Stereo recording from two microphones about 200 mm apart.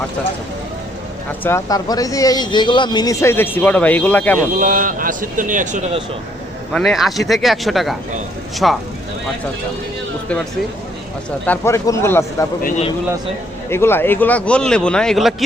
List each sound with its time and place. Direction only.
1.5 s speech: 15° left (ahead or behind)
4.5 s speech: 40° right (ahead or behind)
6.7 s a man's voice: centre (ahead or behind)
11.4 s speech: 10° left (ahead or behind)
13.7 s a man's voice: 10° left (ahead or behind)